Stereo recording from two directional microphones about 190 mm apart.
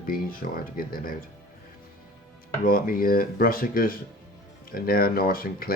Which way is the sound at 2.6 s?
50° left (ahead or behind).